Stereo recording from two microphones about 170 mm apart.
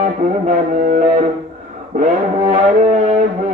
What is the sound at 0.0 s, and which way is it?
Music, 50° right (ahead or behind).